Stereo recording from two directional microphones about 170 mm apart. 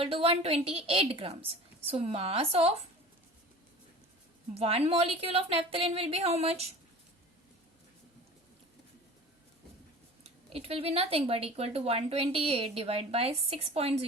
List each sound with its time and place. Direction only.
0.0 s speech: 35° right (ahead or behind)
4.5 s speech: 35° right (ahead or behind)
10.2 s speech: 35° right (ahead or behind)